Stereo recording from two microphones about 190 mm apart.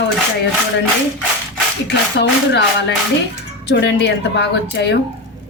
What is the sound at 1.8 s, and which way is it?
Speech, 65° left (ahead or behind).